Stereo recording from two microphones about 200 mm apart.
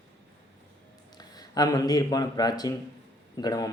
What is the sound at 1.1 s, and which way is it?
Speech, 20° left (ahead or behind).